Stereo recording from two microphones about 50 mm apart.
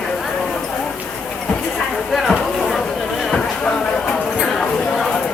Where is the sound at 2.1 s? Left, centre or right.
Centre.